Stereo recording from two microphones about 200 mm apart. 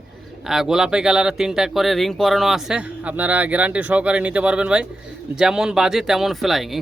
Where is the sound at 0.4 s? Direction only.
Centre (ahead or behind).